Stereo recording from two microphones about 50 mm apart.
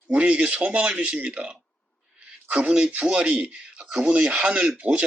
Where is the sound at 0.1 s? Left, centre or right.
Right.